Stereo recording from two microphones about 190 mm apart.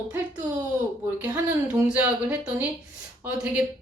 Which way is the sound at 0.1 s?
10° right (ahead or behind).